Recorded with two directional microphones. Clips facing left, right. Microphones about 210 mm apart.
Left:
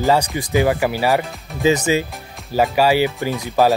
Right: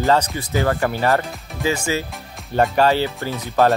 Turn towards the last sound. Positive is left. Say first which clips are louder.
# left 2 dB
turn(degrees=15)  # may be behind; listen again after turning